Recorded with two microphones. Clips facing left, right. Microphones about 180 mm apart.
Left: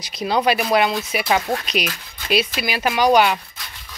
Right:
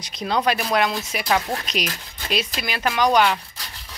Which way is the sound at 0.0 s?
5° left (ahead or behind).